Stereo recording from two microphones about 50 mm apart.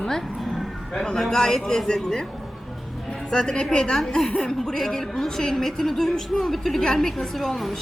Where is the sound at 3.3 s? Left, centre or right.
Centre.